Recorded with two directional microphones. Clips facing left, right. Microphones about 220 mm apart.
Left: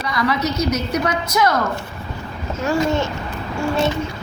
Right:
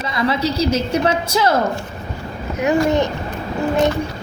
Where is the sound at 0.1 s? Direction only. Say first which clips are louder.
Right 1 dB; 25° right (ahead or behind).